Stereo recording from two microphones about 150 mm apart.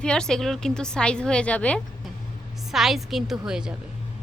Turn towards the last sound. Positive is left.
turn(degrees=-5)  # may be behind; listen again after turning